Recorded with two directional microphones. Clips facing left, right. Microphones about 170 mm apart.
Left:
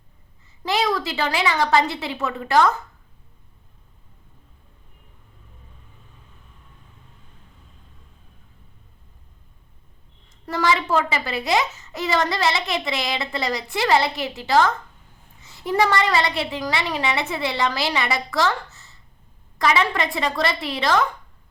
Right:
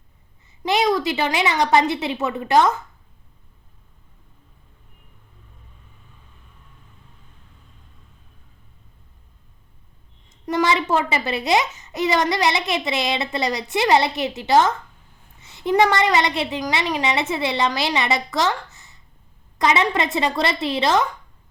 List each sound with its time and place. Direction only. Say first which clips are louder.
0.6 s a child's voice: right 3 dB; 20° right (ahead or behind)
10.4 s a child's voice: right 2 dB; 20° right (ahead or behind)